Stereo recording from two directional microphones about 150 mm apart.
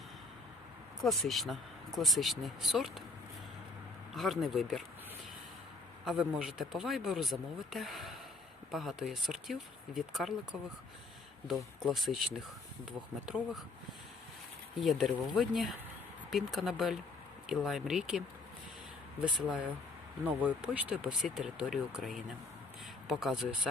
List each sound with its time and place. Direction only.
1.0 s speech: centre (ahead or behind)
4.1 s speech: centre (ahead or behind)
6.1 s speech: 5° right (ahead or behind)
11.9 s speech: centre (ahead or behind)
14.8 s speech: centre (ahead or behind)
19.2 s speech: 5° right (ahead or behind)